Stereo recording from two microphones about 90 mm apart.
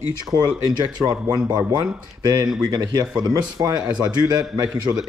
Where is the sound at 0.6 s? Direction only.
45° right (ahead or behind).